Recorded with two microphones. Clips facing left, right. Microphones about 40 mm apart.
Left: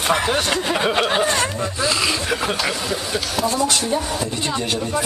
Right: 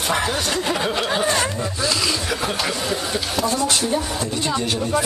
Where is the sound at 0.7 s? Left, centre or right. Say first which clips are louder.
Left 3 dB; left.